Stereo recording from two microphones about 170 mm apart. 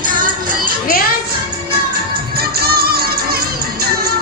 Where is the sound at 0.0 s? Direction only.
50° right (ahead or behind).